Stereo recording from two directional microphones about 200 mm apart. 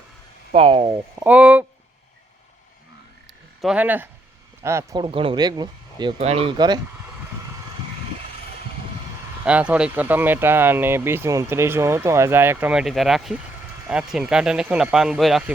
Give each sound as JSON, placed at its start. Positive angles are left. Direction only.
{"t": 0.5, "sound": "speech", "side_deg": -30}
{"t": 1.2, "sound": "speech", "side_deg": -5}
{"t": 3.6, "sound": "speech", "side_deg": -5}
{"t": 9.4, "sound": "speech", "side_deg": -5}